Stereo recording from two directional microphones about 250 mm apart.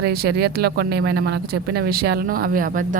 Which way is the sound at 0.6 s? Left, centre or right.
Right.